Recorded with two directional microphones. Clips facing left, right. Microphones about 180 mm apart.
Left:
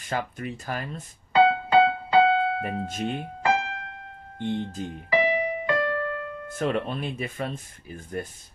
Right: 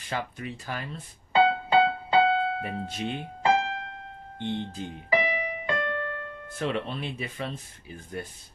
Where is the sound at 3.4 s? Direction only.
30° right (ahead or behind).